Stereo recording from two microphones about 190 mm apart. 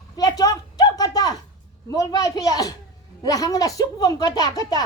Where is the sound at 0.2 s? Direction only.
20° left (ahead or behind).